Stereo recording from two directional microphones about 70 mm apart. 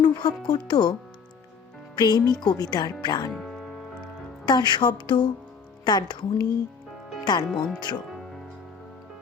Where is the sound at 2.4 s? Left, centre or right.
Left.